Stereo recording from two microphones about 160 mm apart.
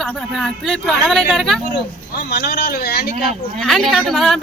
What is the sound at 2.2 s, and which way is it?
Speech, 75° left (ahead or behind).